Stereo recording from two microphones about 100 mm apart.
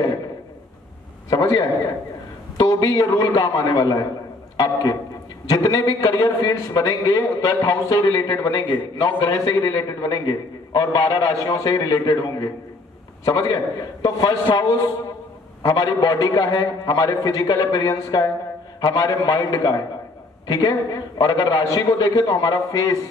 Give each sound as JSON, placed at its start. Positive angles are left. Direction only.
{"t": 1.3, "sound": "a man's voice", "side_deg": 40}
{"t": 5.5, "sound": "a man's voice", "side_deg": 40}